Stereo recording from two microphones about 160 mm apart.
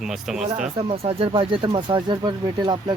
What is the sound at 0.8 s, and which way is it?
Speech, 35° right (ahead or behind).